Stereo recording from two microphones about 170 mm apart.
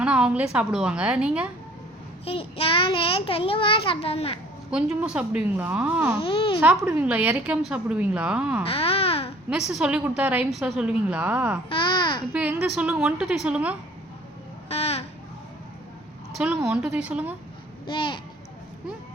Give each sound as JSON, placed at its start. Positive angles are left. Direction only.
{"t": 0.0, "sound": "a woman's voice", "side_deg": -5}
{"t": 2.2, "sound": "a child's voice", "side_deg": 35}
{"t": 4.7, "sound": "a woman's voice", "side_deg": -5}
{"t": 6.2, "sound": "a child's voice", "side_deg": 30}
{"t": 6.6, "sound": "a woman's voice", "side_deg": -10}
{"t": 8.6, "sound": "baby cry", "side_deg": 35}
{"t": 9.5, "sound": "a woman's voice", "side_deg": -5}
{"t": 11.7, "sound": "speech", "side_deg": 30}
{"t": 12.3, "sound": "a woman's voice", "side_deg": -10}
{"t": 14.7, "sound": "a sound", "side_deg": 35}
{"t": 16.4, "sound": "a woman's voice", "side_deg": -5}
{"t": 17.8, "sound": "speech", "side_deg": 30}